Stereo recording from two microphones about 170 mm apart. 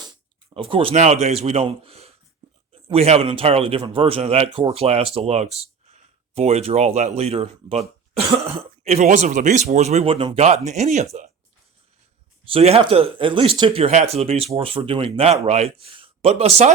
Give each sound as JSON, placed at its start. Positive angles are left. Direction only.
{"t": 0.5, "sound": "speech", "side_deg": -30}
{"t": 12.5, "sound": "speech", "side_deg": -35}